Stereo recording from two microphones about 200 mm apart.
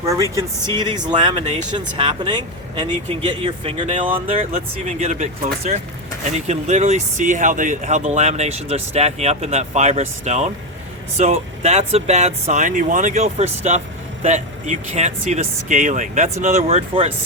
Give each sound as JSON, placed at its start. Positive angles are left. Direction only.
{"t": 0.8, "sound": "speech", "side_deg": -20}
{"t": 4.5, "sound": "speech", "side_deg": -40}